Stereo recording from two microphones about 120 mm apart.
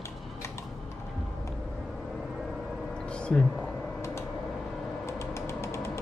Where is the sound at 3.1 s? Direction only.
10° left (ahead or behind).